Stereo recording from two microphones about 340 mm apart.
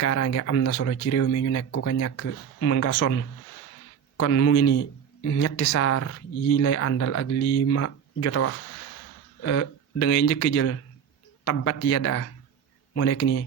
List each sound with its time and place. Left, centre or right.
0.0 s speech: left
4.2 s speech: left